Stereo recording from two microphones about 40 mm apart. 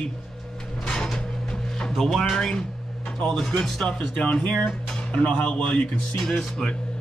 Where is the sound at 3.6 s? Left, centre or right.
Centre.